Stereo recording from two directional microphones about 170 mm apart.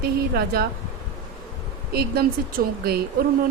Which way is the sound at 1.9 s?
65° right (ahead or behind).